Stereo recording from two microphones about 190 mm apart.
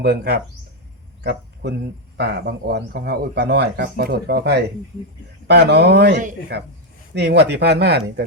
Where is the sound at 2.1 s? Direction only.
60° right (ahead or behind).